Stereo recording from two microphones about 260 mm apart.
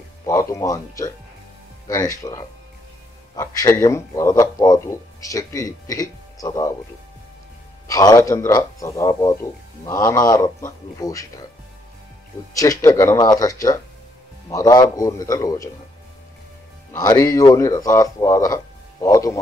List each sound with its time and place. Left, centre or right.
0.2 s a man's voice: centre
7.9 s a man's voice: centre
12.5 s a man's voice: centre
16.9 s speech: centre